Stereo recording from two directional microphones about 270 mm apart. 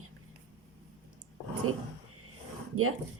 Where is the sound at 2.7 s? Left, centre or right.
Right.